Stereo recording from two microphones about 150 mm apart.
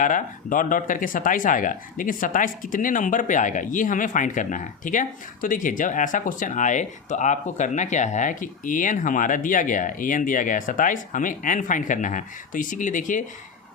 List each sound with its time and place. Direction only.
0.0 s speech: 60° left (ahead or behind)